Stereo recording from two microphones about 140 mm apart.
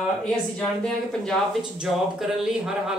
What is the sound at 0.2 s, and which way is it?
Speech, 5° left (ahead or behind).